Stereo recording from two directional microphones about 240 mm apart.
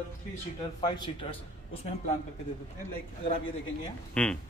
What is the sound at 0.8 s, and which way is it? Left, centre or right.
Speech, centre.